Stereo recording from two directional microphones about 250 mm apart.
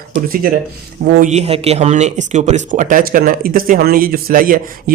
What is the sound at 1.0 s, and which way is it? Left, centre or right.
Speech, right.